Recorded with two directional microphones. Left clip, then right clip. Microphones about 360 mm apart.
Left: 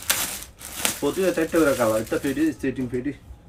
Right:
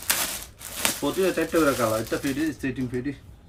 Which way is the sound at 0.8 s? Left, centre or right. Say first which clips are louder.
Left 1 dB; centre.